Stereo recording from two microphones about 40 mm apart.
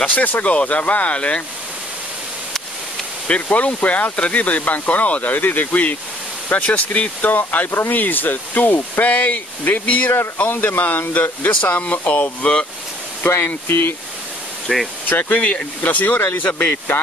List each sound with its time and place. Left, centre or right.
0.1 s speech: left
3.3 s speech: left
9.0 s speech: left
10.5 s speech: left
10.8 s speech: left
11.6 s speech: left
13.7 s speech: left
14.7 s speech: centre
15.0 s speech: left
15.4 s speech: left
16.2 s speech: left
16.4 s speech: left